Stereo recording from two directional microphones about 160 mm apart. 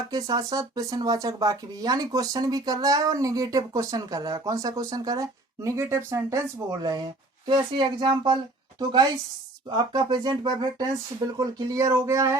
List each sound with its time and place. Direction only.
0.1 s speech: 25° right (ahead or behind)
9.6 s speech: 25° right (ahead or behind)